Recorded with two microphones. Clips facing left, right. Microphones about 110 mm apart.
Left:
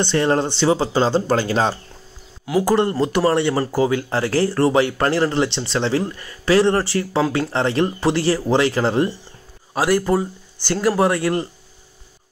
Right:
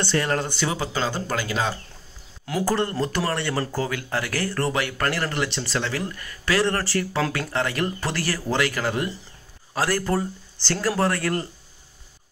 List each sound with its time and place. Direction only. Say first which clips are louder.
0.0 s speech: left 6 dB; 25° left (ahead or behind)
2.4 s speech: left 6 dB; 10° left (ahead or behind); by 9.1 s 30° left (ahead or behind)
9.8 s speech: left 6 dB; 15° left (ahead or behind)